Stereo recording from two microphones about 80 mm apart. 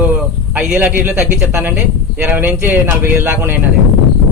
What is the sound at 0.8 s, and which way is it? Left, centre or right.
A man's voice, right.